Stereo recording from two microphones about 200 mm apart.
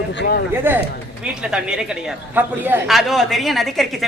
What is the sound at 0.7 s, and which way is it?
A woman's voice, 10° right (ahead or behind).